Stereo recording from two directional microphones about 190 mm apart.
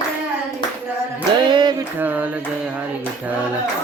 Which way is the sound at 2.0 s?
10° right (ahead or behind).